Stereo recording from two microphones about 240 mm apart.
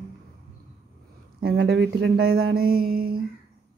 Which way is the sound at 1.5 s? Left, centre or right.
Right.